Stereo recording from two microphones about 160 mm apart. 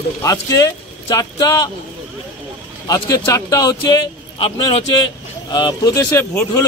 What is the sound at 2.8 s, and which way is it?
A man's voice, 25° left (ahead or behind).